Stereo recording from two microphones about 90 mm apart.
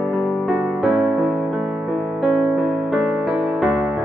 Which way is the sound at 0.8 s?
5° right (ahead or behind).